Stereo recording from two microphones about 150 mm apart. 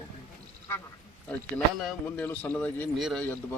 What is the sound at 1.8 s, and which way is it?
A man's voice, 10° left (ahead or behind).